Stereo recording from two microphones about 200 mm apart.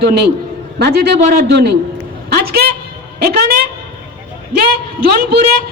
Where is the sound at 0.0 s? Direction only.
55° right (ahead or behind).